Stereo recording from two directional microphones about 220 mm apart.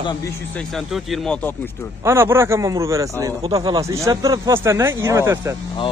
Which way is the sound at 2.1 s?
10° right (ahead or behind).